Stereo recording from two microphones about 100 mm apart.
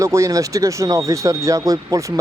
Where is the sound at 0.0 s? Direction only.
30° right (ahead or behind).